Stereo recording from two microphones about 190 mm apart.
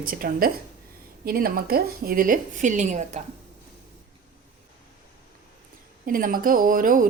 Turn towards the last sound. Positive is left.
turn(degrees=-45)  # may be behind; listen again after turning